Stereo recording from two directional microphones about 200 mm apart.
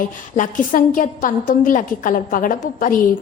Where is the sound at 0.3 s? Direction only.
40° left (ahead or behind).